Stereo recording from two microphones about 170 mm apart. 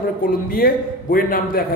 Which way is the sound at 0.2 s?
55° left (ahead or behind).